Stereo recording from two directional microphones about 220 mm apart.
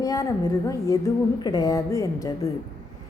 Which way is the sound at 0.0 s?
15° left (ahead or behind).